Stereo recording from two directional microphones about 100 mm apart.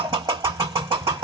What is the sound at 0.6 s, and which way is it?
Vehicle, 65° right (ahead or behind).